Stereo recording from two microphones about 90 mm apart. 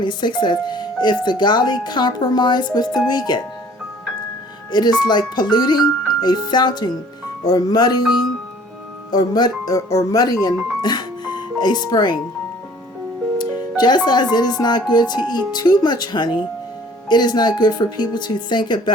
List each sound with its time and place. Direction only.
0.0 s speech: 55° left (ahead or behind)
4.7 s speech: 55° left (ahead or behind)
9.1 s speech: 50° left (ahead or behind)
13.4 s speech: 55° left (ahead or behind)